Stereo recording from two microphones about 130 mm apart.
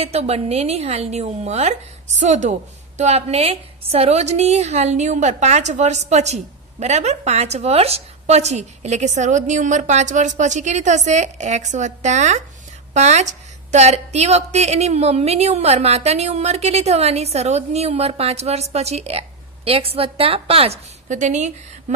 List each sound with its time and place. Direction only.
0.0 s a woman's voice: 55° right (ahead or behind)
21.1 s a woman's voice: 65° right (ahead or behind)